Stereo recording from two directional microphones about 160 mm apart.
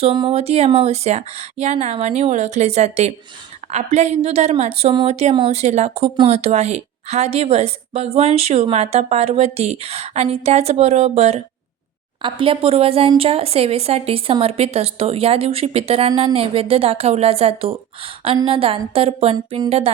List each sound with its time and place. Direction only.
0.0 s a woman's voice: 35° right (ahead or behind)